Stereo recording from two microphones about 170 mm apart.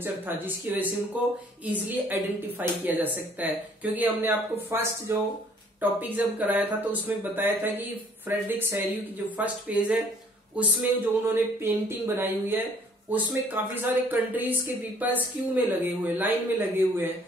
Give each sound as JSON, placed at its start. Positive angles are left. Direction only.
{"t": 0.0, "sound": "speech", "side_deg": -10}